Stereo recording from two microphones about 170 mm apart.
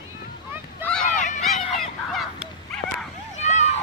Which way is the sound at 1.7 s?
Centre (ahead or behind).